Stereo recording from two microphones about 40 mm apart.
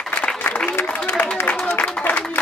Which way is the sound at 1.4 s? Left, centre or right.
Left.